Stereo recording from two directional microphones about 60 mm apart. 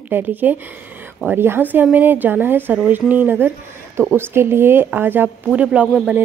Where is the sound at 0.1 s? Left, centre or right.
Right.